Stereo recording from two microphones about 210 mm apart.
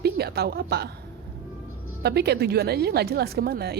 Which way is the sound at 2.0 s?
50° right (ahead or behind).